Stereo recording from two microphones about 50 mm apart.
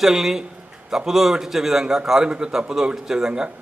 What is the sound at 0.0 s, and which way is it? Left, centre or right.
A man's voice, centre.